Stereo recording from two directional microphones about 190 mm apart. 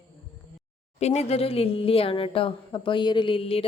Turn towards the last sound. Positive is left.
turn(degrees=30)  # may be behind; listen again after turning